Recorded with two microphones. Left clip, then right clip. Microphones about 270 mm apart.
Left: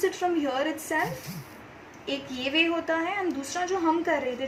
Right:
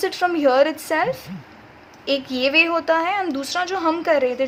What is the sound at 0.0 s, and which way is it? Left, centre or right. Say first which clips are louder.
A woman's voice: right 8 dB; right.